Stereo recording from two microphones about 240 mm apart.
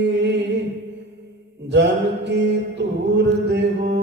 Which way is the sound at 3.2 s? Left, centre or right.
Right.